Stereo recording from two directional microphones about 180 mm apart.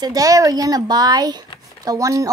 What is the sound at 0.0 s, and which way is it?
Speech, 20° right (ahead or behind).